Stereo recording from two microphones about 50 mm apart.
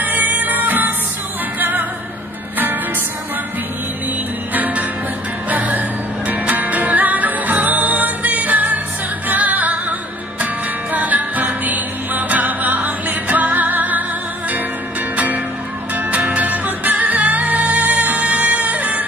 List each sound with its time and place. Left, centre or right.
0.0 s music: right
4.6 s music: right
15.1 s music: right